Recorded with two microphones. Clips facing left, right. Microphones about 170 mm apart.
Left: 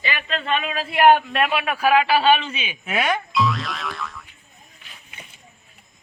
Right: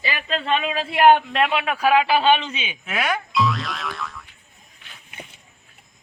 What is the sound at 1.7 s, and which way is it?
Speech, 10° left (ahead or behind).